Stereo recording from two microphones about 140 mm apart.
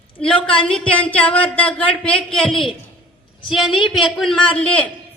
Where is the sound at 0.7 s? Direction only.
5° left (ahead or behind).